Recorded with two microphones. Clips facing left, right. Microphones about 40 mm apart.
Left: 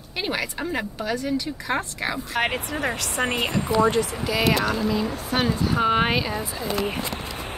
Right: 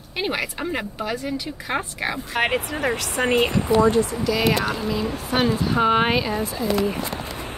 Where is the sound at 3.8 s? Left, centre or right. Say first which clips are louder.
Right 2 dB; left.